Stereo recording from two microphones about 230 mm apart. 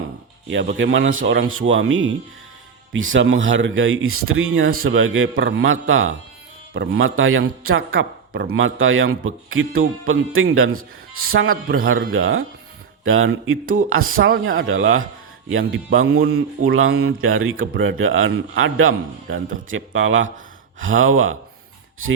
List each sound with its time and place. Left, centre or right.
0.4 s speech: right